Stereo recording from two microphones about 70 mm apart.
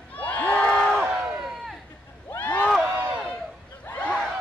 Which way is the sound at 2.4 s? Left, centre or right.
Left.